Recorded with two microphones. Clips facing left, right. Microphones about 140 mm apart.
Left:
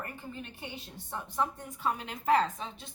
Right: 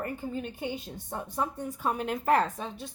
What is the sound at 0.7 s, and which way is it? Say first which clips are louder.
A woman's voice: right 5 dB; 45° right (ahead or behind).